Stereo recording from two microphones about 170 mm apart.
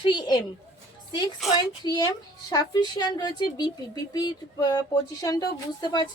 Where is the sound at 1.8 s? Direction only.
25° left (ahead or behind).